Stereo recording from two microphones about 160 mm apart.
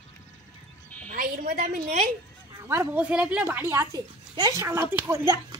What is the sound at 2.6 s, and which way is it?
Speech, 15° right (ahead or behind).